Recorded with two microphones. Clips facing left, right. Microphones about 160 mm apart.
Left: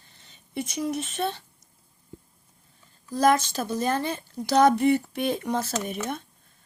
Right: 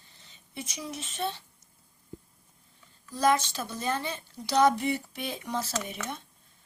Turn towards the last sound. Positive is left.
turn(degrees=50)  # may be behind; listen again after turning